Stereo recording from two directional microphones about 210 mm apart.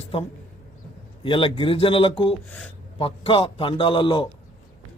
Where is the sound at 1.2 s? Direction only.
25° left (ahead or behind).